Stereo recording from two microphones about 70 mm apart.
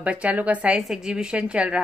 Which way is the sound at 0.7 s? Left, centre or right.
Centre.